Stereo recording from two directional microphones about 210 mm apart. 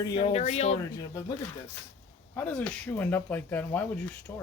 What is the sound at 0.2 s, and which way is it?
Speech, 30° left (ahead or behind).